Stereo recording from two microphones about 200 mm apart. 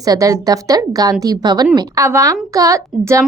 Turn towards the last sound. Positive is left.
turn(degrees=-15)  # may be behind; listen again after turning